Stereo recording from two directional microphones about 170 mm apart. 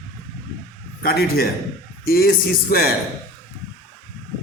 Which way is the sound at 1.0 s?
65° left (ahead or behind).